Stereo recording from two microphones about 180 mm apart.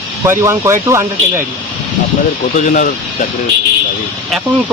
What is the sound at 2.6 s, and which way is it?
Speech, 45° left (ahead or behind).